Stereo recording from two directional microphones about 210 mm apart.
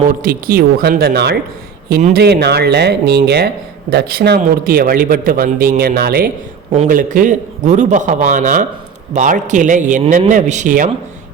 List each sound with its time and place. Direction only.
0.1 s speech: 40° right (ahead or behind)
2.0 s a man's voice: 35° right (ahead or behind)
2.2 s a man's voice: 50° right (ahead or behind)